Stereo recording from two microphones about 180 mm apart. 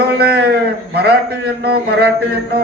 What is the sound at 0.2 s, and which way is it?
Mantra, 65° right (ahead or behind).